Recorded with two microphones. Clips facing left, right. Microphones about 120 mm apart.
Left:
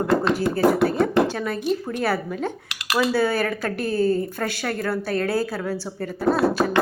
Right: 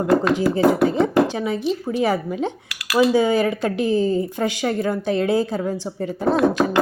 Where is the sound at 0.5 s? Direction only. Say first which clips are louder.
Right 1 dB; 20° right (ahead or behind).